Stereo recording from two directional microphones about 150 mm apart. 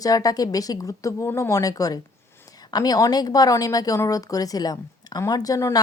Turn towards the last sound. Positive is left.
turn(degrees=25)  # may be behind; listen again after turning